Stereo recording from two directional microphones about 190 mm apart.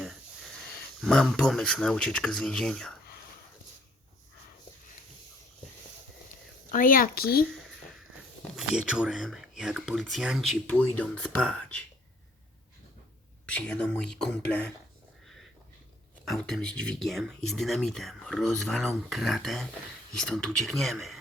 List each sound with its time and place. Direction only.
1.0 s speech: centre (ahead or behind)
6.7 s speech: 45° left (ahead or behind)
8.5 s speech: 5° right (ahead or behind)
13.4 s speech: 5° left (ahead or behind)
16.2 s speech: centre (ahead or behind)